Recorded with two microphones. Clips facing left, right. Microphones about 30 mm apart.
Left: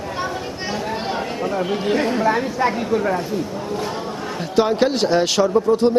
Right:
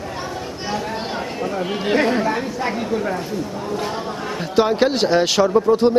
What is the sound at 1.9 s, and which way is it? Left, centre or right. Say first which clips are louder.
Speech: right 3 dB; right.